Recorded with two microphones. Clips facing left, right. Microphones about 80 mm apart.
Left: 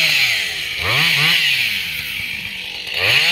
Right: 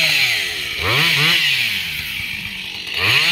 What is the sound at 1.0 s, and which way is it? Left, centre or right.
Chainsaw, centre.